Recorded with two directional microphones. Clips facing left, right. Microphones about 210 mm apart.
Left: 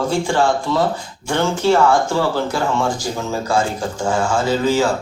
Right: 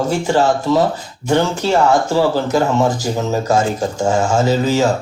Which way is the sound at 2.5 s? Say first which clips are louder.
Right 5 dB; 40° right (ahead or behind).